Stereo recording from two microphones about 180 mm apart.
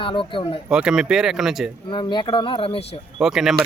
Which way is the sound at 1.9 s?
25° left (ahead or behind).